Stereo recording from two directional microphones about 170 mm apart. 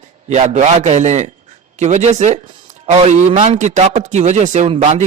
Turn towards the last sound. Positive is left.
turn(degrees=-40)  # may be behind; listen again after turning